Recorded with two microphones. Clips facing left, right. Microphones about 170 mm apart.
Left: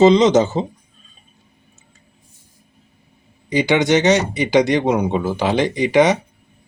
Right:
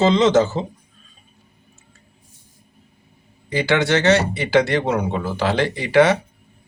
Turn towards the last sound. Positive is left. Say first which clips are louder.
# left 1 dB
turn(degrees=20)  # may be behind; listen again after turning